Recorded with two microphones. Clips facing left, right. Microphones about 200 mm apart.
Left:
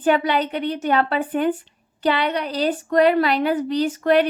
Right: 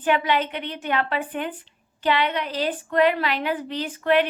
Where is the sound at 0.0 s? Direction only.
40° left (ahead or behind).